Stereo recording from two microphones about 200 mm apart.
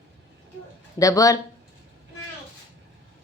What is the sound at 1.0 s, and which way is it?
Speech, 15° left (ahead or behind).